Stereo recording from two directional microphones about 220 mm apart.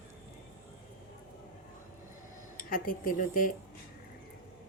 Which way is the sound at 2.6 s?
40° left (ahead or behind).